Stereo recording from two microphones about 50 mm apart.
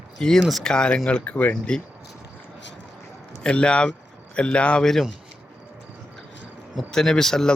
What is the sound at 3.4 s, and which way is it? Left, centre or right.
Speech, left.